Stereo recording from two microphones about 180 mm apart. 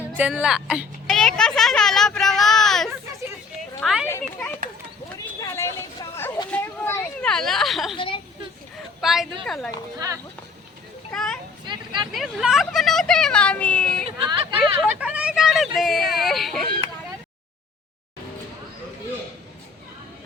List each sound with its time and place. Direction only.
0.2 s a woman's voice: 5° right (ahead or behind)
4.0 s speech: 10° left (ahead or behind)
5.1 s a sound: 15° left (ahead or behind); by 7.9 s centre (ahead or behind)
7.9 s a woman's voice: 30° left (ahead or behind)
9.0 s a woman's voice: centre (ahead or behind)
11.1 s children playing: 5° left (ahead or behind)
11.6 s speech: 25° right (ahead or behind)
12.1 s speech: centre (ahead or behind)
14.0 s speech: 30° right (ahead or behind)
14.6 s speech: 5° right (ahead or behind)